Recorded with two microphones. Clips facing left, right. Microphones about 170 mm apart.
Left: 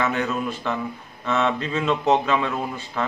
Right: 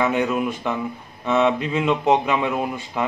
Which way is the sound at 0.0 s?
15° right (ahead or behind).